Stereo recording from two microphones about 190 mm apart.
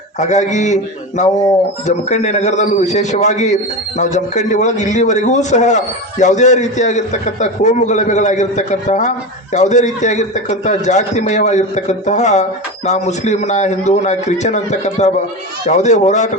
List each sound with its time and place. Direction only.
0.2 s a man's voice: 40° left (ahead or behind)